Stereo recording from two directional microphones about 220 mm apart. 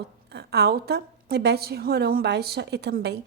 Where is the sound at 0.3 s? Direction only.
45° right (ahead or behind).